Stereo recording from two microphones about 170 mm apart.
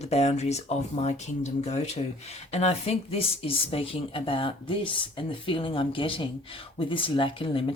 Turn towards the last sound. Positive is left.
turn(degrees=30)  # may be behind; listen again after turning